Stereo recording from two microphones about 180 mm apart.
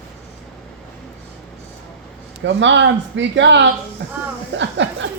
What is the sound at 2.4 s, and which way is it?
Speech, 90° right.